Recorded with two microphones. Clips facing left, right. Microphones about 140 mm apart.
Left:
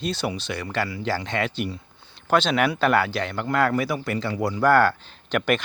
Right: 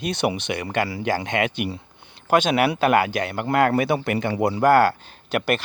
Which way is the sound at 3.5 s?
65° right (ahead or behind).